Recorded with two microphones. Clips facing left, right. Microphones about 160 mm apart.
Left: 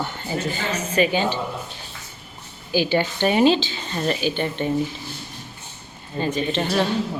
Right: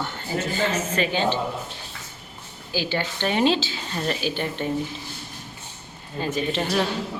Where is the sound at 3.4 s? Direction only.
Centre (ahead or behind).